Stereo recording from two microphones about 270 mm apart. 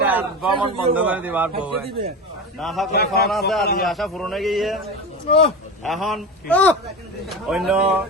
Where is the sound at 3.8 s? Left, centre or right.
Centre.